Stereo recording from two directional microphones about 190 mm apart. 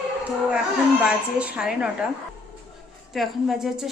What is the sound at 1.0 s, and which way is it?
Speech, 5° right (ahead or behind).